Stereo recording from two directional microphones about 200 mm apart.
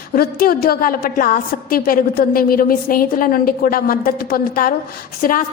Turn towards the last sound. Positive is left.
turn(degrees=45)  # may be behind; listen again after turning